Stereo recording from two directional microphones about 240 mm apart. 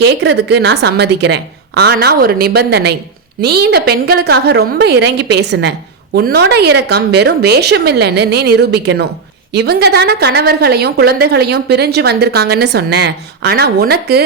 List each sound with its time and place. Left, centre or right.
0.0 s a woman's voice: right